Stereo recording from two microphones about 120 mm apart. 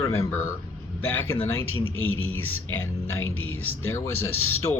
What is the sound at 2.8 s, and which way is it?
Speech, 20° left (ahead or behind).